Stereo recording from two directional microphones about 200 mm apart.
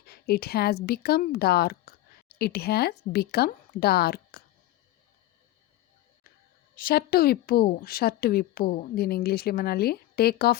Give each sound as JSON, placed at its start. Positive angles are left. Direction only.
{"t": 0.0, "sound": "a woman's voice", "side_deg": 50}
{"t": 6.7, "sound": "a woman's voice", "side_deg": 50}